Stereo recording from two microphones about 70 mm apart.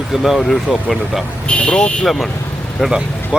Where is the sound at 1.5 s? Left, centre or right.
Centre.